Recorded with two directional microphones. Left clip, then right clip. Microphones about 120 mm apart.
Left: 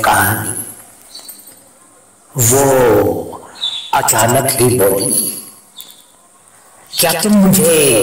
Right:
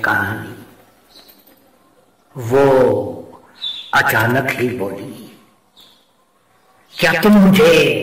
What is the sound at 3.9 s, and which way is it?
A man's voice, 30° left (ahead or behind).